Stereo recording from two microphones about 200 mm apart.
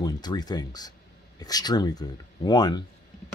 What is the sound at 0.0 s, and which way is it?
Speech, 20° left (ahead or behind).